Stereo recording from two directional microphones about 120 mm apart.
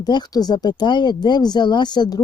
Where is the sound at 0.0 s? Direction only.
35° left (ahead or behind).